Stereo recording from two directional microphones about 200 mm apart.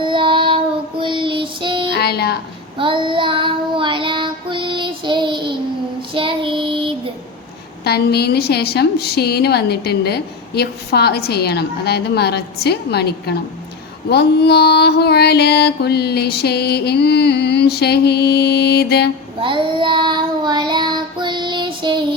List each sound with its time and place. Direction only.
0.0 s child singing: 25° right (ahead or behind)
2.0 s speech: 50° left (ahead or behind)
2.7 s child singing: 25° right (ahead or behind)
7.9 s a woman's voice: 55° left (ahead or behind)
14.1 s mantra: 55° left (ahead or behind)
19.4 s child singing: 25° right (ahead or behind)